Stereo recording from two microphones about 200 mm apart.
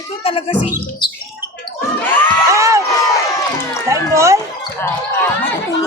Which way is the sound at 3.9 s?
15° right (ahead or behind).